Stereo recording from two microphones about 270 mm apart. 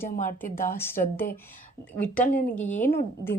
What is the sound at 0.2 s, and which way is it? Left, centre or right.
Speech, left.